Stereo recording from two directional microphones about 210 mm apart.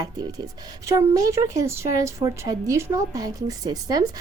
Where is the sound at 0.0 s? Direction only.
20° right (ahead or behind).